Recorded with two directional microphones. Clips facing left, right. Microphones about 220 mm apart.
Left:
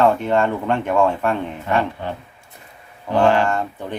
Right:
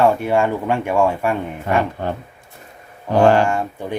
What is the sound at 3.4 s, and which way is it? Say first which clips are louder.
Speech: right 2 dB; 10° right (ahead or behind).